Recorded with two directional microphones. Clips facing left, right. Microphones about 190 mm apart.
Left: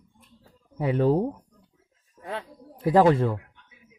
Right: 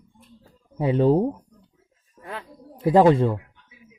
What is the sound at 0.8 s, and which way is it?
Speech, 25° right (ahead or behind).